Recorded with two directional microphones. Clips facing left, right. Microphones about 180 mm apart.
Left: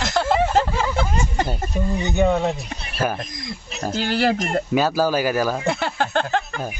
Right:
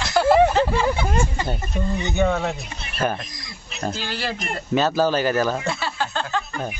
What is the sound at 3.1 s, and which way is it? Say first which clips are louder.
A woman's voice: left 6 dB; 50° left (ahead or behind).